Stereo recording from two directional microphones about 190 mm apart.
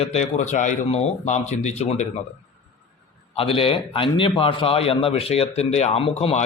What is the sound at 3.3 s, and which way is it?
A man's voice, 30° left (ahead or behind).